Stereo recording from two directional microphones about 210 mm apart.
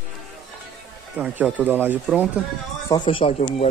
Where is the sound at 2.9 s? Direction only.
25° left (ahead or behind).